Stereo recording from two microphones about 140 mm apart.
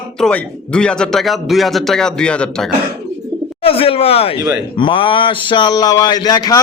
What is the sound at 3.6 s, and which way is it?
A man's voice, 40° left (ahead or behind).